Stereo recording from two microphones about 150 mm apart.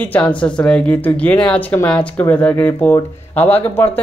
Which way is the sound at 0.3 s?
5° left (ahead or behind).